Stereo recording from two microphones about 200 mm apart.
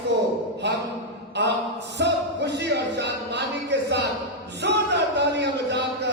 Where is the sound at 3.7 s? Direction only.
60° right (ahead or behind).